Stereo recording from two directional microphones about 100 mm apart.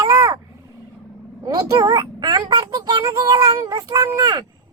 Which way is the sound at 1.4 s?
40° right (ahead or behind).